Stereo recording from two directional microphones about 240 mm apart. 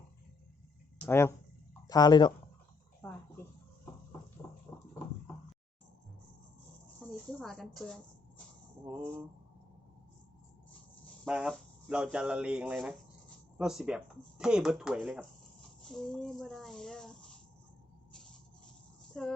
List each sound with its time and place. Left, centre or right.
1.0 s speech: centre
3.0 s a sound: centre
7.0 s a sound: centre
7.3 s a woman's voice: centre
8.9 s speech: centre
11.3 s speech: centre
19.1 s speech: centre